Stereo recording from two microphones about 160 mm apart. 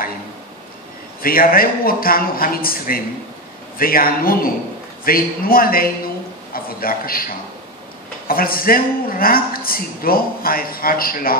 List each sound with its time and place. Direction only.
1.2 s a man's voice: 65° left (ahead or behind)